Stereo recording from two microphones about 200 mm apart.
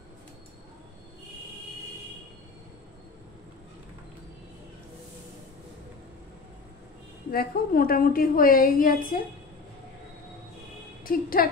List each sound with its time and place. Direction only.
7.2 s a woman's voice: 50° left (ahead or behind)
11.1 s a woman's voice: 45° left (ahead or behind)